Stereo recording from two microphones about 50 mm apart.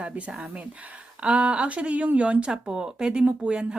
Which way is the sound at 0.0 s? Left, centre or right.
Right.